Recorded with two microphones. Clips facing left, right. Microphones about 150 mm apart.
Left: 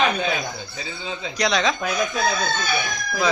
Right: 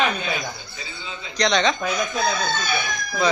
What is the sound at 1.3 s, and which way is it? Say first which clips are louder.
Speech: right 2 dB; 5° left (ahead or behind).